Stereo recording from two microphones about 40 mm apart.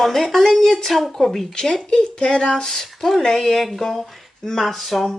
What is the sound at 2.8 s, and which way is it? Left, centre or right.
Speech, centre.